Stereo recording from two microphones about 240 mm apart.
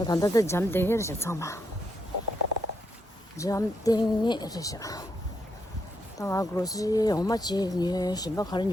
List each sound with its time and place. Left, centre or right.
0.0 s speech: centre
3.3 s speech: centre
6.1 s speech: centre